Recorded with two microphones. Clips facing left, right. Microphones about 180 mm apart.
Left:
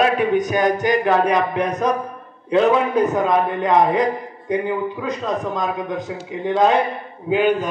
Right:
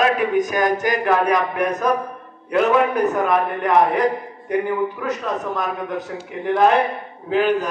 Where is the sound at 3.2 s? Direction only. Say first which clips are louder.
Left 1 dB; 20° left (ahead or behind).